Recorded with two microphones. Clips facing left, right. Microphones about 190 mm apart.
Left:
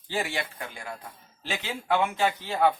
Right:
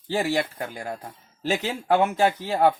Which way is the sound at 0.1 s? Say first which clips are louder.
Right 7 dB; 35° right (ahead or behind).